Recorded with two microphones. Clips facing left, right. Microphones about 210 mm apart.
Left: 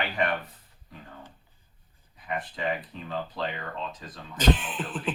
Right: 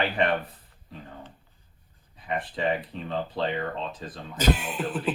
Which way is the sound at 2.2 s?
30° right (ahead or behind).